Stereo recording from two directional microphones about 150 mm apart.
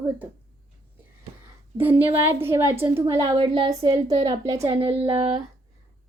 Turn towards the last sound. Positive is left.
turn(degrees=-35)  # may be behind; listen again after turning